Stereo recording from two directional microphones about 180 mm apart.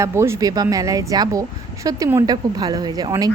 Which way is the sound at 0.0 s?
15° right (ahead or behind).